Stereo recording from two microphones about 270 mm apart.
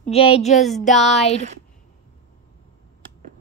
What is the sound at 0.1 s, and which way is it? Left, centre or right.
Speech, left.